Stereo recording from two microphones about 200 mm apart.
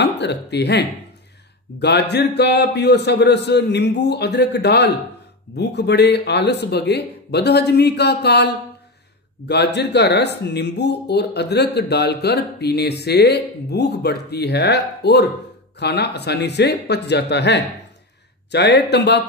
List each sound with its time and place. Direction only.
0.0 s speech: 60° left (ahead or behind)